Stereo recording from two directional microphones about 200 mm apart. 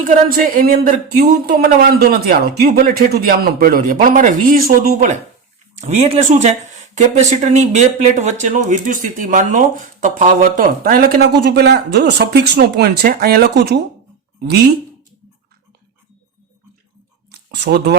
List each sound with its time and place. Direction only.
0.1 s speech: 45° right (ahead or behind)
17.5 s speech: 60° right (ahead or behind)